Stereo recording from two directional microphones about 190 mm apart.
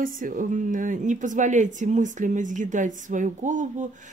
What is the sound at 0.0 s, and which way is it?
Speech, 45° right (ahead or behind).